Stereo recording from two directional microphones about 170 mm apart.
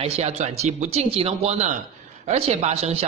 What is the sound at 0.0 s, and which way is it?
Speech, 40° right (ahead or behind).